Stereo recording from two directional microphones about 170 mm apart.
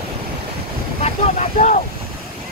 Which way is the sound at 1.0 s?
40° left (ahead or behind).